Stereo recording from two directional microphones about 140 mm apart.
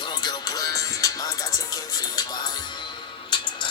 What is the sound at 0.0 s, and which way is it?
Music, 30° left (ahead or behind).